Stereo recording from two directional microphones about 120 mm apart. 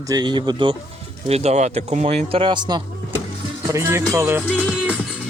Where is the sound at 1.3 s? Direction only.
65° right (ahead or behind); by 2.8 s 40° right (ahead or behind).